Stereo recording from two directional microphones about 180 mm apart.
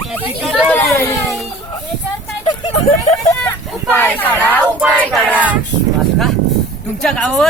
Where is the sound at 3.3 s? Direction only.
10° left (ahead or behind).